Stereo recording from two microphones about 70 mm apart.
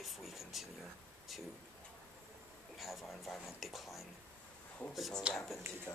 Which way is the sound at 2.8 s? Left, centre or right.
Centre.